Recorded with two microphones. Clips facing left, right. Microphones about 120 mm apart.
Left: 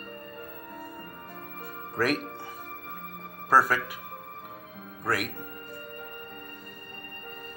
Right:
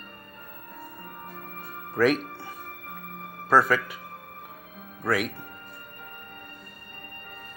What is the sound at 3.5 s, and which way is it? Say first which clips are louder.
Speech: right 2 dB; 5° left (ahead or behind).